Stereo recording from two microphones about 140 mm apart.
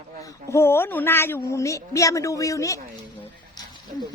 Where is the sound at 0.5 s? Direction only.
15° left (ahead or behind).